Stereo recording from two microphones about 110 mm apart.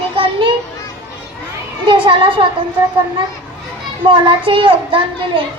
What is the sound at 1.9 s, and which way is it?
Child singing, 50° right (ahead or behind).